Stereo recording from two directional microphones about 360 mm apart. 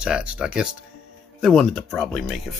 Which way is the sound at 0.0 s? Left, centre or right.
Centre.